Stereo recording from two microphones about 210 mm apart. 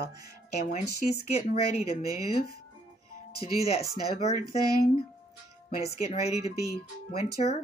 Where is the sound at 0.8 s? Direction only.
50° left (ahead or behind).